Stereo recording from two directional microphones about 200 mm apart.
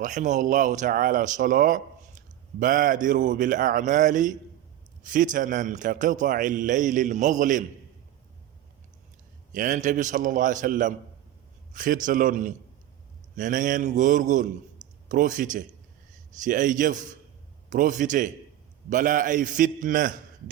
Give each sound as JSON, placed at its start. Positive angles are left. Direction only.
{"t": 0.0, "sound": "speech", "side_deg": -40}
{"t": 9.5, "sound": "a man's voice", "side_deg": -40}